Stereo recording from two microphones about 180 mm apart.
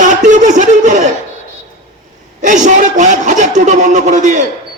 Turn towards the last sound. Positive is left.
turn(degrees=-40)  # may be behind; listen again after turning